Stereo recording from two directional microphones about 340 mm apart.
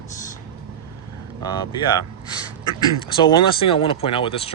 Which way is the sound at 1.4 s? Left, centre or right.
Centre.